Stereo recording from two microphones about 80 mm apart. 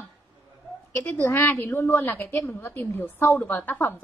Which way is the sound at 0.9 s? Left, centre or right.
Left.